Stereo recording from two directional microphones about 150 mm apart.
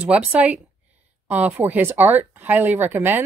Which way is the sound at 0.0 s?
10° right (ahead or behind).